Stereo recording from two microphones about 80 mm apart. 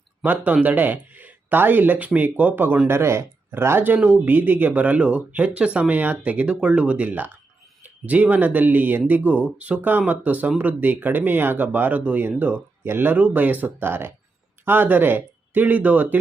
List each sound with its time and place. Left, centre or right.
0.2 s speech: centre
2.8 s speech: right